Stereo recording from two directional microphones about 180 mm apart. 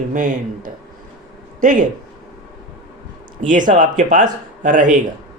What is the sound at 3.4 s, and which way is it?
Speech, 45° right (ahead or behind).